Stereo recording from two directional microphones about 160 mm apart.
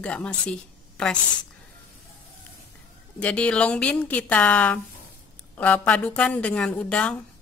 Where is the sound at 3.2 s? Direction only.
10° left (ahead or behind).